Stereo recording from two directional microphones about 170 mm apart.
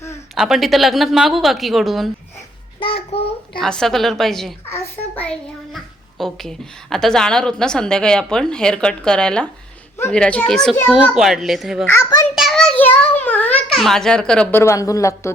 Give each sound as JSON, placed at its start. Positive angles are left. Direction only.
{"t": 0.3, "sound": "a child's voice", "side_deg": 0}
{"t": 2.8, "sound": "a child's voice", "side_deg": 35}
{"t": 3.6, "sound": "a child's voice", "side_deg": 5}
{"t": 4.7, "sound": "a child's voice", "side_deg": 10}
{"t": 11.9, "sound": "speech", "side_deg": 15}
{"t": 12.3, "sound": "a child's voice", "side_deg": 0}
{"t": 14.6, "sound": "speech", "side_deg": 20}